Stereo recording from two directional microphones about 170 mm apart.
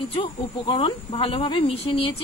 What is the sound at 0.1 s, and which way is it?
A woman's voice, 30° left (ahead or behind).